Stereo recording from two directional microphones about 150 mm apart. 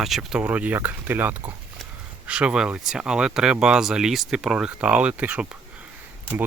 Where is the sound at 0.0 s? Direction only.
Centre (ahead or behind).